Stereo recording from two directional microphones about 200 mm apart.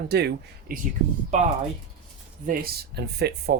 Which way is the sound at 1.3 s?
35° right (ahead or behind).